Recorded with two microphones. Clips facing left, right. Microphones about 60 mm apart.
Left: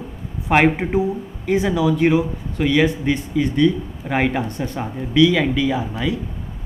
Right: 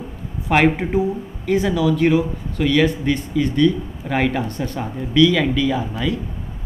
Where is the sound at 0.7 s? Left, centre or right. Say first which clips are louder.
Even; centre.